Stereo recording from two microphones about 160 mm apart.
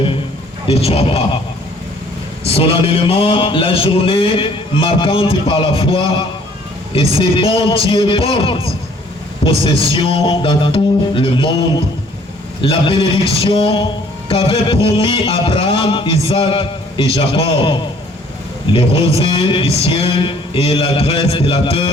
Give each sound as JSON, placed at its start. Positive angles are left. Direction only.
{"t": 0.7, "sound": "a man's voice", "side_deg": 40}
{"t": 2.4, "sound": "a man's voice", "side_deg": 35}